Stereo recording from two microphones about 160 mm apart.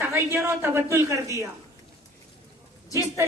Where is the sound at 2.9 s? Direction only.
20° right (ahead or behind).